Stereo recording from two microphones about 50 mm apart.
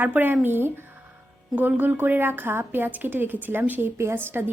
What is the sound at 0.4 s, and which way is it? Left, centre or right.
Speech, right.